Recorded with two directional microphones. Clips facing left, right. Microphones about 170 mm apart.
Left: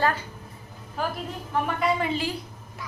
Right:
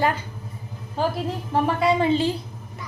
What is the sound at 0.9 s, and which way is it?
A woman's voice, 30° right (ahead or behind).